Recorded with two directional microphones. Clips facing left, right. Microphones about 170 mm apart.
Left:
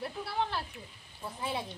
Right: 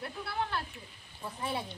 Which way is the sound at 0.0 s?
30° left (ahead or behind).